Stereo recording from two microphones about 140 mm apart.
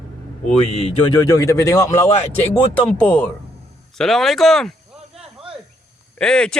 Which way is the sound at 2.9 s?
10° left (ahead or behind).